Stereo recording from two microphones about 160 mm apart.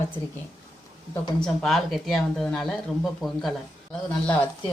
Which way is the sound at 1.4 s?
Centre (ahead or behind).